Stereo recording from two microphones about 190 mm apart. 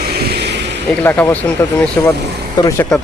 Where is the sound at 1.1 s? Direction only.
10° left (ahead or behind).